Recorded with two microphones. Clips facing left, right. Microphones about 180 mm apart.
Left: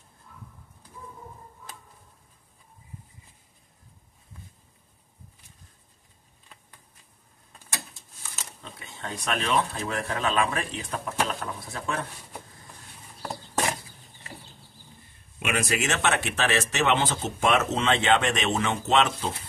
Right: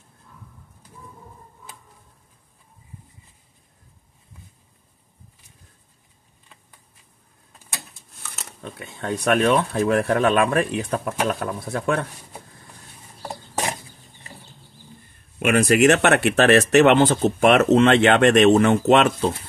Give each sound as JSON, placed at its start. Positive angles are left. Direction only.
{"t": 8.2, "sound": "speech", "side_deg": -65}
{"t": 15.3, "sound": "speech", "side_deg": -50}